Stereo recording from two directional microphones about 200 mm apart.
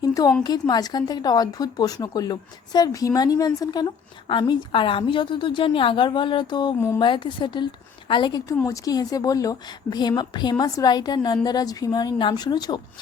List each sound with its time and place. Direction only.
0.0 s a sound: 20° left (ahead or behind)
0.4 s speech: 20° left (ahead or behind)
7.0 s speech: 25° left (ahead or behind)